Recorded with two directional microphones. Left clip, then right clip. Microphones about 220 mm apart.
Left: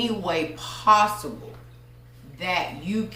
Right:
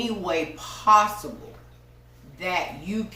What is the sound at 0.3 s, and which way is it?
Speech, 5° left (ahead or behind).